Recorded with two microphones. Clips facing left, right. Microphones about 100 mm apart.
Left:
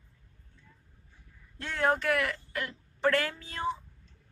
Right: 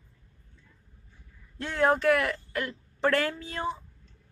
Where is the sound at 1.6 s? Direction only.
25° right (ahead or behind).